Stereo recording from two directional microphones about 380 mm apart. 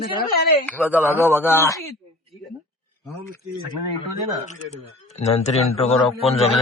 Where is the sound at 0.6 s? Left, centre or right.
Centre.